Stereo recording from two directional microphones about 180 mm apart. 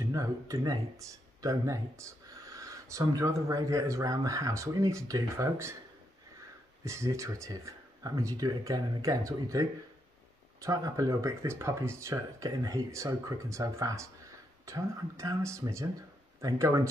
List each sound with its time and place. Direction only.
0.0 s speech: 15° right (ahead or behind)
6.8 s speech: 15° right (ahead or behind)